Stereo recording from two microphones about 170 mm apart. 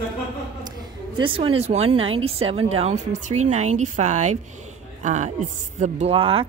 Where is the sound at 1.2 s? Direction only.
30° right (ahead or behind).